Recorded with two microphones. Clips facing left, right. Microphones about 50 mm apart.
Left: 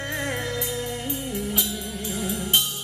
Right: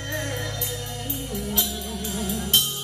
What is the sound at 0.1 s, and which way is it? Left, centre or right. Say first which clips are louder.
Music: left 1 dB; left.